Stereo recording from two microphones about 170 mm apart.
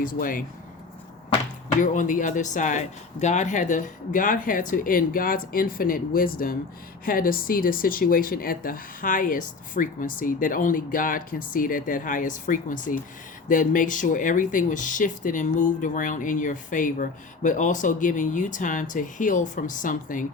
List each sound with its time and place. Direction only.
0.0 s speech: 55° left (ahead or behind)
1.8 s speech: 50° left (ahead or behind)